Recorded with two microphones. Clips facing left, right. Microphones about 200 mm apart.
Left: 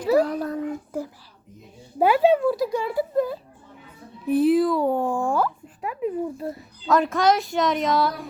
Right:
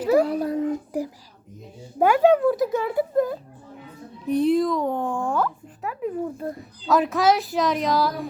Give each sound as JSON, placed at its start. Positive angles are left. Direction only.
{"t": 0.2, "sound": "a child's voice", "side_deg": -10}
{"t": 2.0, "sound": "speech", "side_deg": 10}
{"t": 2.6, "sound": "speech", "side_deg": -20}
{"t": 4.3, "sound": "speech", "side_deg": 5}